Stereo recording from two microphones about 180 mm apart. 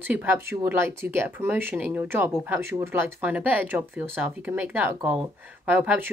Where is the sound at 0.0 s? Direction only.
10° right (ahead or behind).